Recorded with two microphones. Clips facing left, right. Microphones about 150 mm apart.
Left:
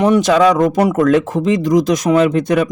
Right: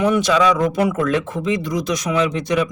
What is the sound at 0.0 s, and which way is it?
Speech, 45° left (ahead or behind).